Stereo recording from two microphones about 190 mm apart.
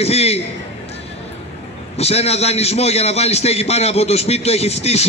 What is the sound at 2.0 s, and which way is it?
A man's voice, 35° left (ahead or behind).